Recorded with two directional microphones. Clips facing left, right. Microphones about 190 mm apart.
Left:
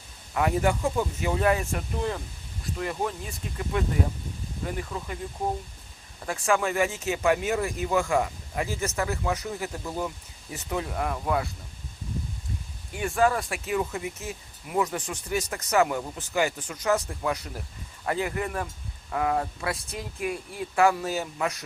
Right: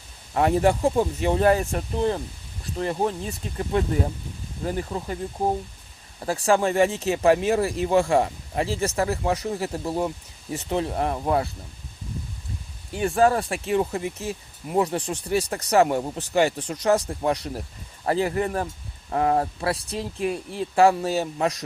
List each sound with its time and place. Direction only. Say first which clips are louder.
0.3 s speech: right 5 dB; 35° right (ahead or behind)
12.9 s speech: right 4 dB; 30° right (ahead or behind)